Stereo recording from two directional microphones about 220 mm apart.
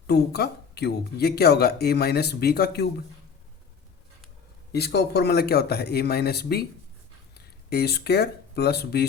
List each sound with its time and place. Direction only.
0.1 s speech: 45° left (ahead or behind)
4.7 s speech: 50° left (ahead or behind)